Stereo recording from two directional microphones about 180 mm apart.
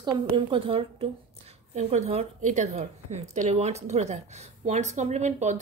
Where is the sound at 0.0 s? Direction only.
30° right (ahead or behind).